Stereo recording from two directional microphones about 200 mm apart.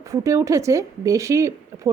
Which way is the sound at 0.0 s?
15° right (ahead or behind).